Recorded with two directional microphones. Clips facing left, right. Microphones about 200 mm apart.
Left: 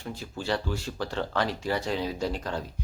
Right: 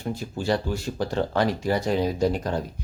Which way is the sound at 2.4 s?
15° right (ahead or behind).